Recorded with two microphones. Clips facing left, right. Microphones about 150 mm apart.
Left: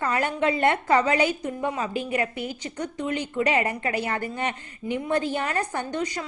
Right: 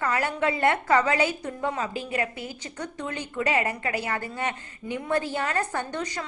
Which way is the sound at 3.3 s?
25° left (ahead or behind).